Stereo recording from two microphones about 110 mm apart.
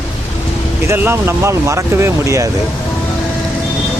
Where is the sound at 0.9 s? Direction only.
25° right (ahead or behind).